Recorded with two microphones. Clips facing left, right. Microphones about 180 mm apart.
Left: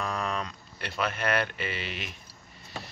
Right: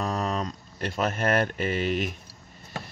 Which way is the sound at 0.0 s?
40° right (ahead or behind).